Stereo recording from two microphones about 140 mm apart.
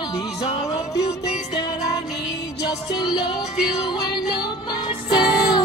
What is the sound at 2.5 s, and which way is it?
Music, 30° left (ahead or behind).